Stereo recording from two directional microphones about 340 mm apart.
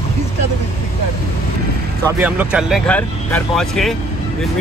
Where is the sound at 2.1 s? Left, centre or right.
Centre.